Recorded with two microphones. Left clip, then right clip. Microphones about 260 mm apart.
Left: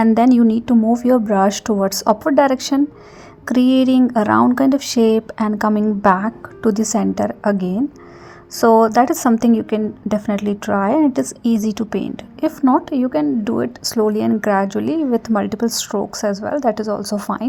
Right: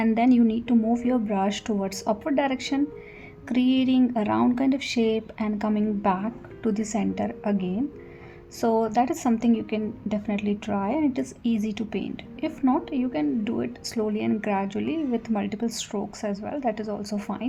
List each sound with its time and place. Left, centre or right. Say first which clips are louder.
0.0 s a woman's voice: left 8 dB; left